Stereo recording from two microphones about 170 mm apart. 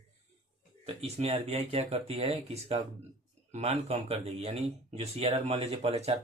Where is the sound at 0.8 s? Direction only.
35° right (ahead or behind).